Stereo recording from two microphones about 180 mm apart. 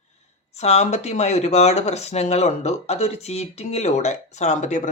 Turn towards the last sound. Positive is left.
turn(degrees=45)  # may be behind; listen again after turning